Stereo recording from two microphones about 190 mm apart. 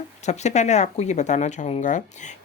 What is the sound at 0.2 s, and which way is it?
Speech, 35° left (ahead or behind).